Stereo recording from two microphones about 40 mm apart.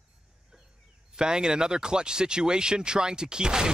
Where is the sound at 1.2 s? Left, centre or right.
Centre.